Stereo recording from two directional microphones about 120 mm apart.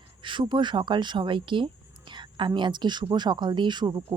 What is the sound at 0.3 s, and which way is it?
Speech, 40° right (ahead or behind).